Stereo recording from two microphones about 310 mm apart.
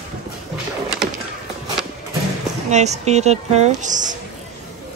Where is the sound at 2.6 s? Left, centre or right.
Right.